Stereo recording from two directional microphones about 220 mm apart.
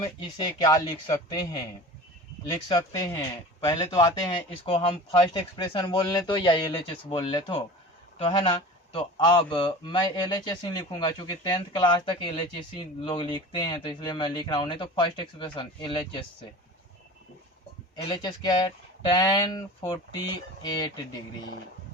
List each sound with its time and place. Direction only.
0.2 s a man's voice: 20° left (ahead or behind)
17.9 s a man's voice: 20° left (ahead or behind)